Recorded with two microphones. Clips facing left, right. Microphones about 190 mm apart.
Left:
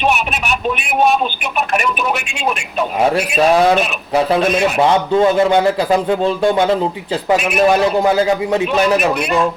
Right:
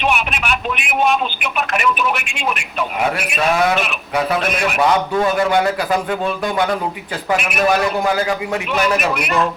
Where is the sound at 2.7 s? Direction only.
30° left (ahead or behind).